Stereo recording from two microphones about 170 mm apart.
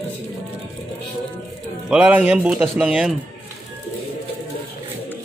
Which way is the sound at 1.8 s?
5° right (ahead or behind).